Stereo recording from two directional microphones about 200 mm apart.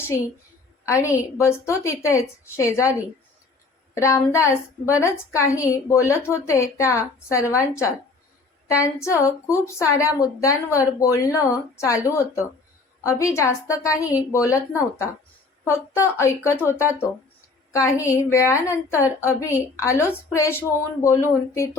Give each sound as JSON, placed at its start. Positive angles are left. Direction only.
{"t": 0.9, "sound": "a woman's voice", "side_deg": 15}
{"t": 3.9, "sound": "a woman's voice", "side_deg": 15}
{"t": 17.7, "sound": "a woman's voice", "side_deg": 15}